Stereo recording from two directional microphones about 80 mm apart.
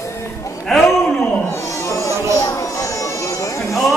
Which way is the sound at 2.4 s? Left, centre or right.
Left.